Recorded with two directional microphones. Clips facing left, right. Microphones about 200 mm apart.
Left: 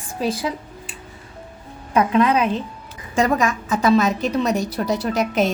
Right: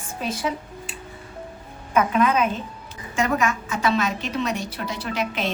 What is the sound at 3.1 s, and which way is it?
A woman's voice, 35° left (ahead or behind).